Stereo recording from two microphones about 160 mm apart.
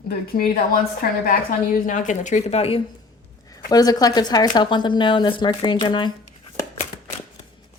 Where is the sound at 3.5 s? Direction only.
25° left (ahead or behind).